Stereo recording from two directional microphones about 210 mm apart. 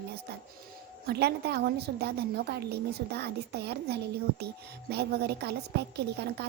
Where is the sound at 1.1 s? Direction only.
50° right (ahead or behind).